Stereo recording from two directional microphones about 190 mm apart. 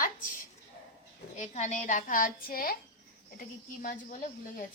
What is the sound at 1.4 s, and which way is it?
A woman's voice, 40° left (ahead or behind).